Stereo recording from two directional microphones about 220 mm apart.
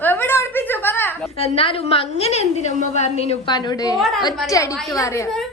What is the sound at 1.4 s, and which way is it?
A woman's voice, 25° left (ahead or behind).